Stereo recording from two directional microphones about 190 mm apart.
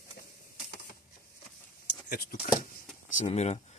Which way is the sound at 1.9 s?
50° left (ahead or behind).